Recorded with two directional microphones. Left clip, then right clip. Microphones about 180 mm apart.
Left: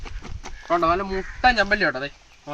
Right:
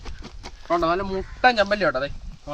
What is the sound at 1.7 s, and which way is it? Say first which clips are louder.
Speech: even; 25° right (ahead or behind).